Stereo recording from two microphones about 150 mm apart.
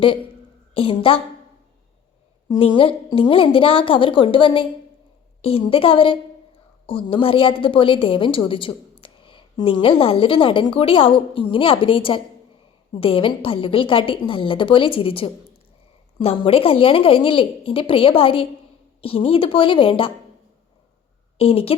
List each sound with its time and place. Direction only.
0.7 s a woman's voice: 35° left (ahead or behind)
2.5 s a woman's voice: 35° left (ahead or behind)
21.3 s a woman's voice: 40° left (ahead or behind)